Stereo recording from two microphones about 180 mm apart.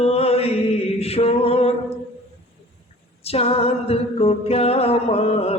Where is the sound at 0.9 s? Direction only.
35° left (ahead or behind).